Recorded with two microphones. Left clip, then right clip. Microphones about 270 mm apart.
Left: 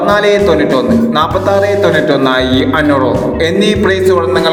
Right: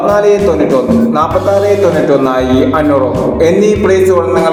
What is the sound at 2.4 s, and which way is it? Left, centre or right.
Music, left.